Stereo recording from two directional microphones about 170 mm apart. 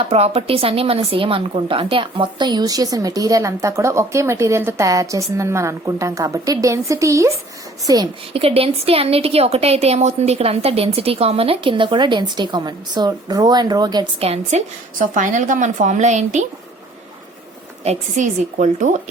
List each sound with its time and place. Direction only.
0.1 s speech: 35° right (ahead or behind)
8.3 s a woman's voice: 35° right (ahead or behind)
14.3 s a woman's voice: 45° right (ahead or behind)
17.8 s a woman's voice: 45° right (ahead or behind)